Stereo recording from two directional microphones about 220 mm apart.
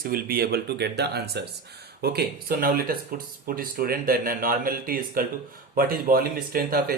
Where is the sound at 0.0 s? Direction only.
40° right (ahead or behind).